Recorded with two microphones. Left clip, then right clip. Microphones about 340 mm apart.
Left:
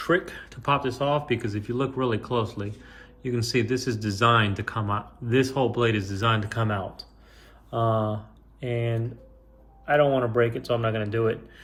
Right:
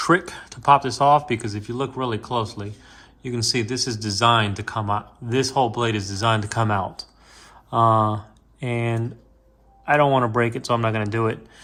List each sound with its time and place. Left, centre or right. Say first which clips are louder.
0.0 s speech: right 5 dB; centre
8.6 s speech: right 3 dB; centre